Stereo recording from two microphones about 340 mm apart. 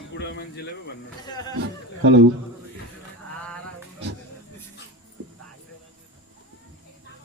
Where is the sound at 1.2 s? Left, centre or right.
Centre.